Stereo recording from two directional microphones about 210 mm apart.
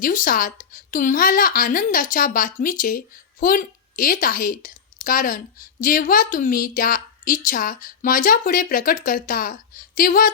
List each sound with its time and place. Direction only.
0.0 s a woman's voice: 40° left (ahead or behind)